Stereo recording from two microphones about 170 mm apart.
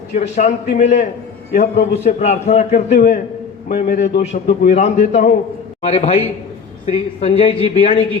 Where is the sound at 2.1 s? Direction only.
45° left (ahead or behind).